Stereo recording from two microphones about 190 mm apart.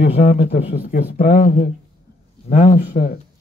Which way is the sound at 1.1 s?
50° left (ahead or behind).